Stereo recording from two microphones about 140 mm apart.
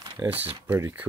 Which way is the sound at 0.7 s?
15° right (ahead or behind).